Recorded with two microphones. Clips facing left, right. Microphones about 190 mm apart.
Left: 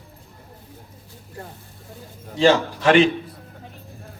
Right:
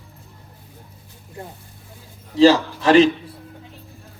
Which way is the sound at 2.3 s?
35° right (ahead or behind).